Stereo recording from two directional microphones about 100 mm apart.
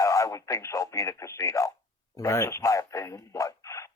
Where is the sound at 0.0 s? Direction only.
30° left (ahead or behind).